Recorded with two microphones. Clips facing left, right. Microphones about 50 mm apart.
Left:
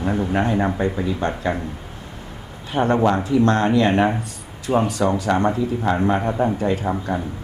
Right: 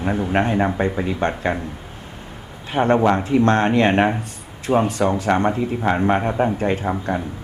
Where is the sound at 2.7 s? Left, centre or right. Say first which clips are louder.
Right 1 dB; right.